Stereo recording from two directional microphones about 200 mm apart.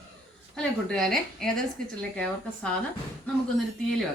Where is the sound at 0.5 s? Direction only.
5° left (ahead or behind).